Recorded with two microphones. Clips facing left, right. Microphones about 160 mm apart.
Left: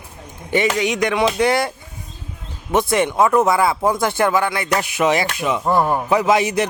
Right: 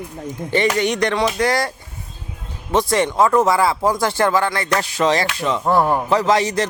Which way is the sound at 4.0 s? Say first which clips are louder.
Even; 15° left (ahead or behind).